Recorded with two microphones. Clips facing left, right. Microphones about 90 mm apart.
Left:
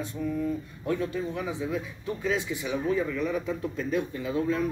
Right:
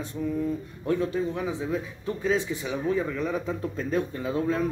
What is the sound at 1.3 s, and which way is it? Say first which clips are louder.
Speech: right 2 dB; 35° right (ahead or behind).